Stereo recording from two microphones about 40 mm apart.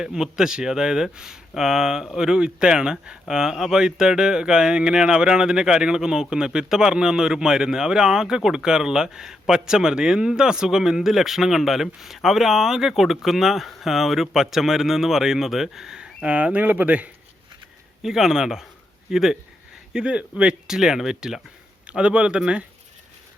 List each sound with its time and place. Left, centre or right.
0.0 s speech: centre
16.0 s speech: right
18.0 s speech: centre; by 20.6 s right
20.7 s speech: centre
21.8 s a man's voice: right